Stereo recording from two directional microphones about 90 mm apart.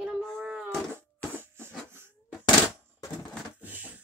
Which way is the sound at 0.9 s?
25° right (ahead or behind).